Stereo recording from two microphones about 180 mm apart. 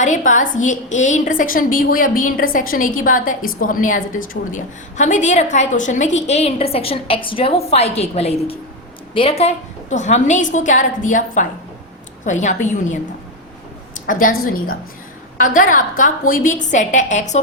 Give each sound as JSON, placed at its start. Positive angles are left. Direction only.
{"t": 0.0, "sound": "a woman's voice", "side_deg": 45}
{"t": 14.1, "sound": "a woman's voice", "side_deg": 50}